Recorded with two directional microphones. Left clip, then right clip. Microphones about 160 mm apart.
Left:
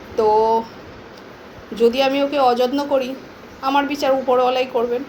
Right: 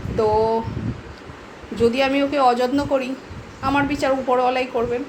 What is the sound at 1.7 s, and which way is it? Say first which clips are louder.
A woman's voice: left 2 dB; 5° right (ahead or behind).